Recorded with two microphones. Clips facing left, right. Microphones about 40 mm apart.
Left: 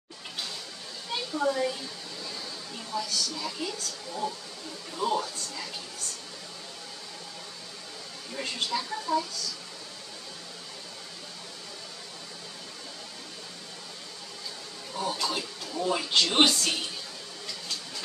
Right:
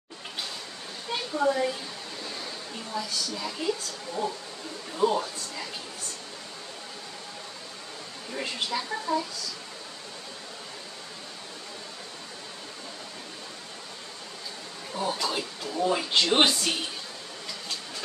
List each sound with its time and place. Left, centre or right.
1.3 s a woman's voice: centre
2.9 s a woman's voice: centre
8.3 s a woman's voice: centre
14.9 s speech: centre